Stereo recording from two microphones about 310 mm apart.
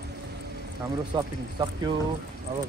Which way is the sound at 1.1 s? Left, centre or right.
Centre.